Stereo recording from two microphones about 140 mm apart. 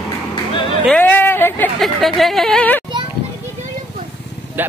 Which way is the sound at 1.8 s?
Centre (ahead or behind).